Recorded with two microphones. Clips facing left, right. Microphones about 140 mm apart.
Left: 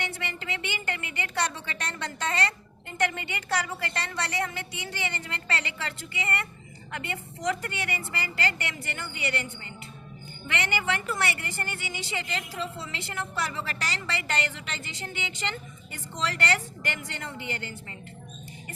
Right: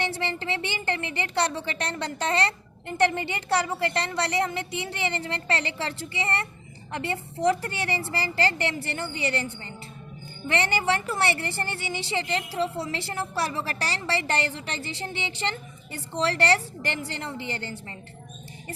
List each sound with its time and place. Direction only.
0.0 s a woman's voice: 30° right (ahead or behind)